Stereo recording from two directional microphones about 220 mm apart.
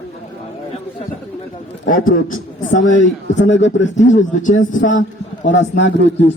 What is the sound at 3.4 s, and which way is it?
Speech, 55° left (ahead or behind).